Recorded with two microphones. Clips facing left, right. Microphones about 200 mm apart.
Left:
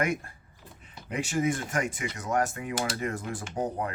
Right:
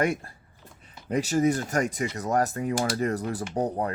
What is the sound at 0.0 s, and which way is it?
Speech, 35° right (ahead or behind).